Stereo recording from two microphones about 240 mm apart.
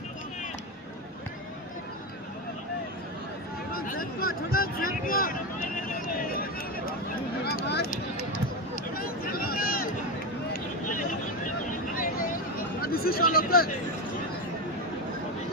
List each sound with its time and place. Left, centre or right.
3.7 s speech: left
6.3 s a sound: left
12.8 s speech: left